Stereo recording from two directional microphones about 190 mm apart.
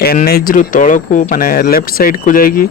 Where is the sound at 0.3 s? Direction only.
50° left (ahead or behind).